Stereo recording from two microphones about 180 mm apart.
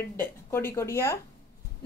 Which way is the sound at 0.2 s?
15° left (ahead or behind).